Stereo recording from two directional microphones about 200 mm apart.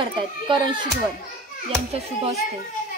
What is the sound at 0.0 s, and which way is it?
Speech, 25° right (ahead or behind).